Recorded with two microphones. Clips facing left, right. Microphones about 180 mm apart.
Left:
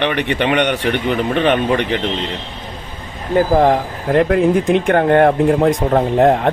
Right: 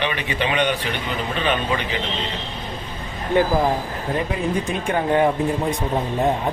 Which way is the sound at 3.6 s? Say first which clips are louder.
Left 7 dB; 75° left (ahead or behind).